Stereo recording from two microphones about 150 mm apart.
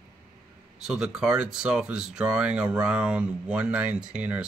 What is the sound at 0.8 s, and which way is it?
Speech, 5° right (ahead or behind).